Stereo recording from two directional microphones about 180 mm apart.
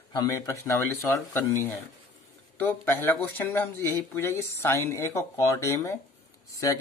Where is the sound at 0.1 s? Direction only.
20° left (ahead or behind).